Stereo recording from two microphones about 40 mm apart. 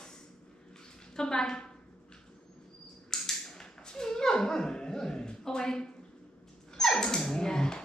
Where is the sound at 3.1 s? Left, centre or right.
Centre.